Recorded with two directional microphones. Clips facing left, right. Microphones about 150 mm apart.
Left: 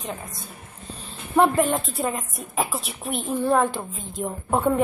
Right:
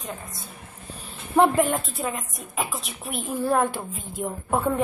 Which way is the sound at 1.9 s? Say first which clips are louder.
Left 3 dB; centre (ahead or behind).